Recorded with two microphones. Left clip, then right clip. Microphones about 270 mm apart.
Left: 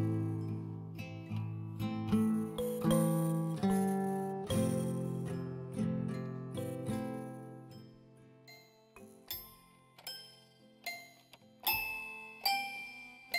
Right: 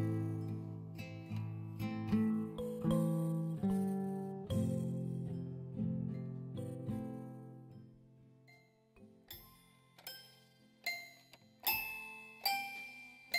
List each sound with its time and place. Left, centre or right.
0.0 s music: centre
2.4 s music: centre
3.1 s music: left
10.0 s music: centre